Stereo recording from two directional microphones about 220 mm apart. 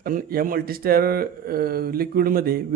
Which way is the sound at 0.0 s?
40° right (ahead or behind).